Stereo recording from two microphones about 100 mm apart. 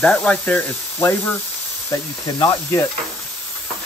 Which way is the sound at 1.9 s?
35° left (ahead or behind).